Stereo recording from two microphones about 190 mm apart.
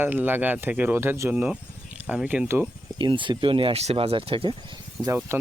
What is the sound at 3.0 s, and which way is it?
Speech, 25° right (ahead or behind).